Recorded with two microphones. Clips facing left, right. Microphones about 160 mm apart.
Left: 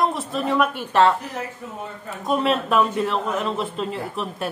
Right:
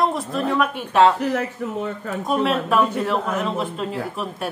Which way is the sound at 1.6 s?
80° right.